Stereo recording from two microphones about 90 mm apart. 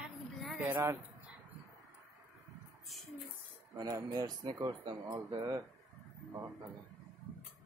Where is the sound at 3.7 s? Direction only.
50° right (ahead or behind).